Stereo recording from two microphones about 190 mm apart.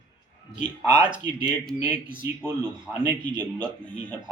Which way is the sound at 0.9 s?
25° right (ahead or behind).